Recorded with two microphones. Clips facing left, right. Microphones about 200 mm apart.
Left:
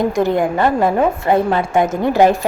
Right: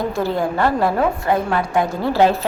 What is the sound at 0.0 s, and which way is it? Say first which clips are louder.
Speech: left 5 dB; 15° left (ahead or behind).